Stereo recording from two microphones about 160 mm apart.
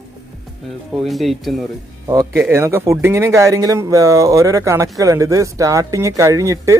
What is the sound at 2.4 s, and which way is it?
Speech, 15° right (ahead or behind).